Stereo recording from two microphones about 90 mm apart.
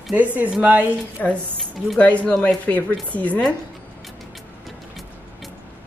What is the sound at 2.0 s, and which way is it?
Speech, 15° left (ahead or behind).